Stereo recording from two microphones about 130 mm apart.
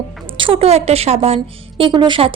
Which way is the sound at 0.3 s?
40° right (ahead or behind).